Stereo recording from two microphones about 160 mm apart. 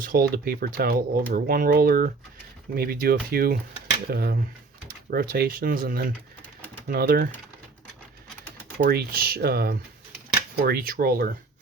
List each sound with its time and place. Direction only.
0.0 s speech: 65° right (ahead or behind)
8.8 s speech: 70° right (ahead or behind)